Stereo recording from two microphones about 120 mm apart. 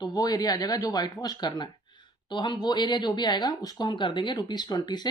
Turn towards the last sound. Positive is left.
turn(degrees=35)  # may be behind; listen again after turning